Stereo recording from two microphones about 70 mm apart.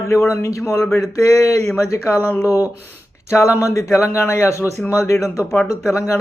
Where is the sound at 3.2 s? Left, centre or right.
Left.